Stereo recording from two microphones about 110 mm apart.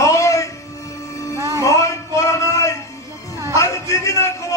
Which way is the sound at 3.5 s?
30° left (ahead or behind).